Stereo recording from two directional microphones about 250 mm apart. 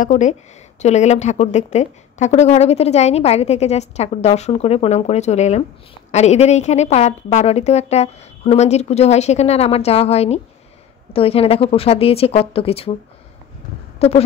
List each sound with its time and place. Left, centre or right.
0.0 s a woman's voice: left
13.9 s speech: left